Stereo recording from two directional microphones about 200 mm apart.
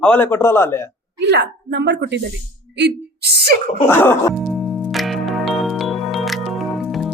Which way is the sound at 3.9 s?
10° left (ahead or behind).